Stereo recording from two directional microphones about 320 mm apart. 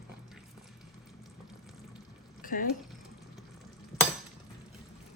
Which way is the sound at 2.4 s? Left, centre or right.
Left.